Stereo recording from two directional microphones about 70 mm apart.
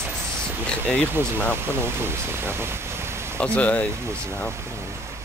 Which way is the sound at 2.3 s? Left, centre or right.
Right.